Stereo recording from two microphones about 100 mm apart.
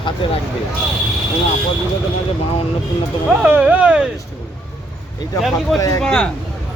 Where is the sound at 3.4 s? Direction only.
15° right (ahead or behind).